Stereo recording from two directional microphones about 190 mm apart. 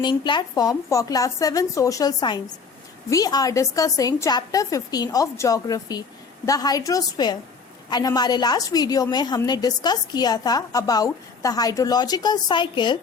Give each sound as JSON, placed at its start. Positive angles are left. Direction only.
{"t": 0.0, "sound": "a woman's voice", "side_deg": 25}